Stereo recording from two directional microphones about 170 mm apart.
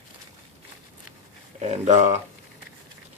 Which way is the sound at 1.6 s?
45° right (ahead or behind).